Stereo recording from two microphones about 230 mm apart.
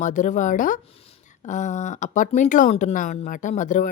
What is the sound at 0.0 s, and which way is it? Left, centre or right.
A woman's voice, left.